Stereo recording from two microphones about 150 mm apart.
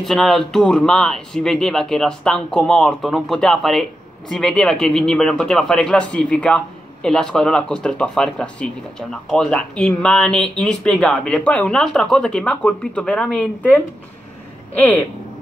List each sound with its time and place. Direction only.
0.0 s speech: centre (ahead or behind)